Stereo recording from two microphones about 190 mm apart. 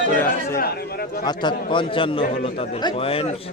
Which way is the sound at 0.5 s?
55° left (ahead or behind).